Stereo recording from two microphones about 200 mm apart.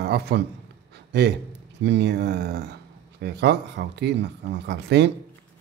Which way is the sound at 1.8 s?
60° right (ahead or behind).